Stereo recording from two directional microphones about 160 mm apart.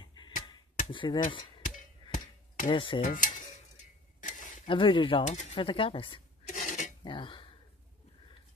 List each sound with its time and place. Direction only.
0.0 s finger snapping: 30° left (ahead or behind)
0.9 s speech: 30° left (ahead or behind)
2.0 s a sound: 55° left (ahead or behind)
2.7 s speech: 30° left (ahead or behind)
3.0 s cutlery: 55° left (ahead or behind)
4.6 s speech: 30° left (ahead or behind)
5.2 s speech: 45° left (ahead or behind)
6.4 s dishes: 50° left (ahead or behind)
7.0 s speech: 30° left (ahead or behind)